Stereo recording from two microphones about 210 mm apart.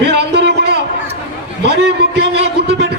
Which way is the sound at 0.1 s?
50° right (ahead or behind).